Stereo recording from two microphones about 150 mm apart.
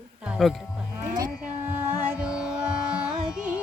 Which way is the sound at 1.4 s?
15° right (ahead or behind).